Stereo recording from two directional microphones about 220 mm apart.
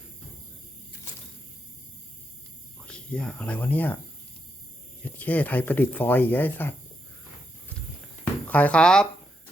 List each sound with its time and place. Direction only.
2.8 s speech: 5° left (ahead or behind)
5.0 s speech: 5° left (ahead or behind)
8.4 s speech: 5° left (ahead or behind)